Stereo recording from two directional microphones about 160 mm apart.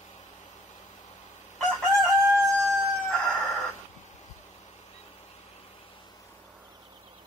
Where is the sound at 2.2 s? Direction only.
20° right (ahead or behind).